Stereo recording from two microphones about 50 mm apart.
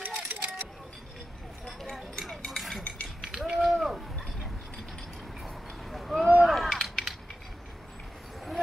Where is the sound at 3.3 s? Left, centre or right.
Centre.